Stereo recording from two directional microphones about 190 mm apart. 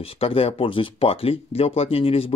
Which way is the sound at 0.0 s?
30° left (ahead or behind).